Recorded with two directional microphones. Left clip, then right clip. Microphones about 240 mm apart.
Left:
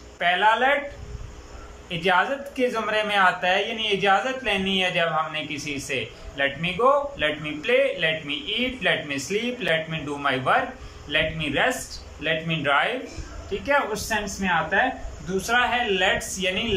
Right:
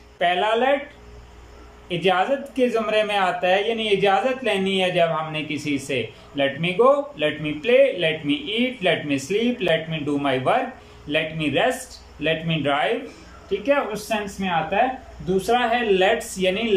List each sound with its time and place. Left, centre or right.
0.2 s speech: centre
1.9 s speech: centre